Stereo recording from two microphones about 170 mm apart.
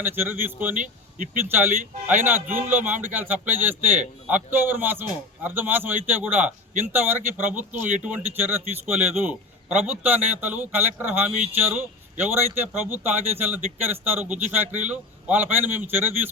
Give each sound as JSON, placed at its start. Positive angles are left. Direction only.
{"t": 0.0, "sound": "a man's voice", "side_deg": -15}
{"t": 0.8, "sound": "speech", "side_deg": -50}
{"t": 1.5, "sound": "a man's voice", "side_deg": -10}
{"t": 7.5, "sound": "speech", "side_deg": -50}
{"t": 7.9, "sound": "a man's voice", "side_deg": -10}